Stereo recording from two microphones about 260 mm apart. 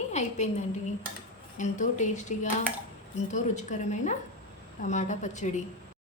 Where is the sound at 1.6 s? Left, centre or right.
Left.